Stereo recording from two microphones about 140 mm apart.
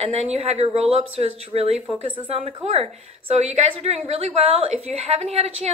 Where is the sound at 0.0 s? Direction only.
45° right (ahead or behind).